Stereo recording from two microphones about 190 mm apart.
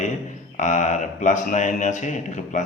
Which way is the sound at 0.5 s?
40° left (ahead or behind).